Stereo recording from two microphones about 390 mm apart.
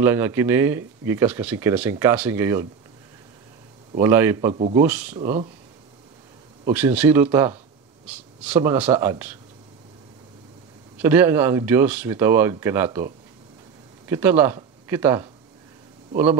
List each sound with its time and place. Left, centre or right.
0.0 s speech: centre
4.0 s speech: centre
5.1 s speech: centre
6.6 s speech: centre
11.0 s speech: centre